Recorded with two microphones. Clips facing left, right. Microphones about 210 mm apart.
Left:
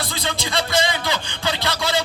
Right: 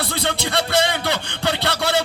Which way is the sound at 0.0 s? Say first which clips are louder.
Right 3 dB; 65° right (ahead or behind).